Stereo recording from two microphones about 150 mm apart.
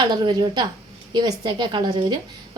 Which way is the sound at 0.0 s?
30° right (ahead or behind).